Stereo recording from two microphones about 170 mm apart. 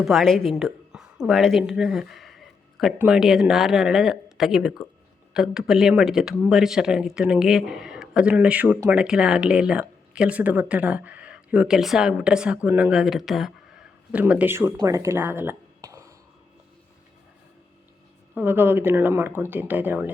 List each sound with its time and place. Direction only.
0.0 s a woman's voice: centre (ahead or behind); by 16.1 s 15° right (ahead or behind)
18.3 s speech: 10° right (ahead or behind)